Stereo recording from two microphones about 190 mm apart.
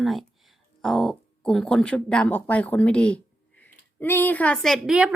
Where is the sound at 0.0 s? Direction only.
Centre (ahead or behind).